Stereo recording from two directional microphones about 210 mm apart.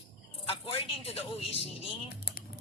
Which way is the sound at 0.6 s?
25° left (ahead or behind).